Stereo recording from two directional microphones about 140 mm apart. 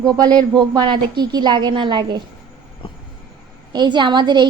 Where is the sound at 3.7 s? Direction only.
30° right (ahead or behind).